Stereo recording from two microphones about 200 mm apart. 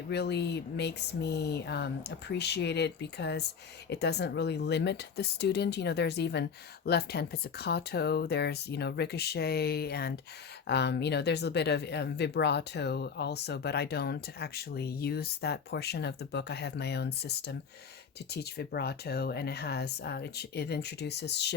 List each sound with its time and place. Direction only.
0.1 s speech: 55° left (ahead or behind)